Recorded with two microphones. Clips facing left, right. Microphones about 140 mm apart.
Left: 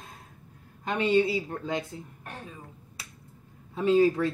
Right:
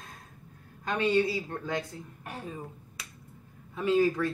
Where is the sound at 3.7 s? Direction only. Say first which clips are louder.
Left 3 dB; 25° left (ahead or behind).